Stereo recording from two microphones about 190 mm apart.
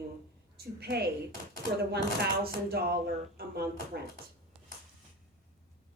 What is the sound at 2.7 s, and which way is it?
A woman's voice, 55° right (ahead or behind).